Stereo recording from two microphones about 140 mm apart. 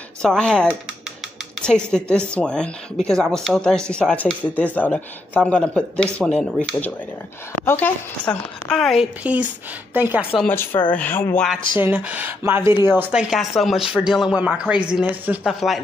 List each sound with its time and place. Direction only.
0.2 s speech: 5° left (ahead or behind)
9.2 s speech: 10° right (ahead or behind)
10.4 s speech: 15° left (ahead or behind)
11.8 s speech: 10° right (ahead or behind)
13.3 s speech: centre (ahead or behind)